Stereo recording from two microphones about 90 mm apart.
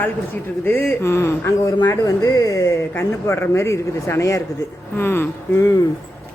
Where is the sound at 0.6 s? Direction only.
25° left (ahead or behind); by 2.7 s 40° left (ahead or behind).